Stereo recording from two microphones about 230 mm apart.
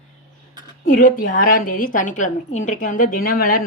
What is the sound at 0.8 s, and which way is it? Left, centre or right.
A woman's voice, left.